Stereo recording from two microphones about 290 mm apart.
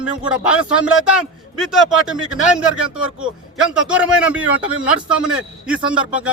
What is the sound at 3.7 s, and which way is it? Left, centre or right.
A man's voice, centre.